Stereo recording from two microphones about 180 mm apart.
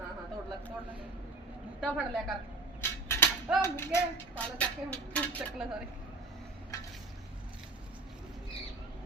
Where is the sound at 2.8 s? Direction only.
15° left (ahead or behind).